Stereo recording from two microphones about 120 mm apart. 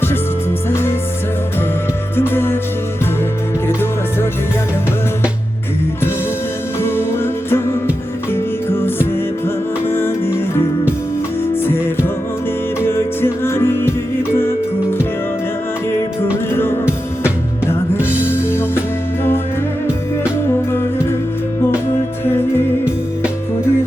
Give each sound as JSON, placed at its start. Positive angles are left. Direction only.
{"t": 0.7, "sound": "music", "side_deg": 20}
{"t": 2.1, "sound": "music", "side_deg": 20}
{"t": 3.7, "sound": "music", "side_deg": 20}
{"t": 6.8, "sound": "music", "side_deg": 20}
{"t": 16.5, "sound": "music", "side_deg": 20}
{"t": 18.3, "sound": "music", "side_deg": 20}
{"t": 22.2, "sound": "music", "side_deg": 20}